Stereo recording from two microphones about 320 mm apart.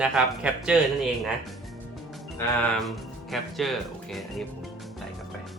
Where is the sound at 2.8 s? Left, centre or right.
Centre.